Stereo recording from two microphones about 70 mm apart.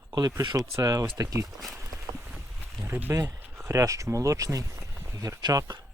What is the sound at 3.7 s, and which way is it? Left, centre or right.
Speech, right.